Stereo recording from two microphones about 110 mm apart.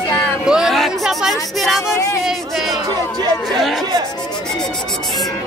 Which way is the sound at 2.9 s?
40° right (ahead or behind).